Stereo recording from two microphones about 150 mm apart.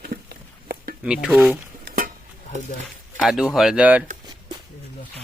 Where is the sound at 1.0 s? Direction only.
5° right (ahead or behind).